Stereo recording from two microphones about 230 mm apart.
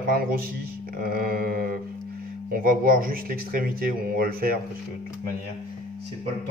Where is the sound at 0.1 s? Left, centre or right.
Right.